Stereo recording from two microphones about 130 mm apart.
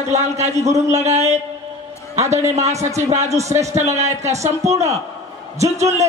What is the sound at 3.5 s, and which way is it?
A man's voice, 25° right (ahead or behind).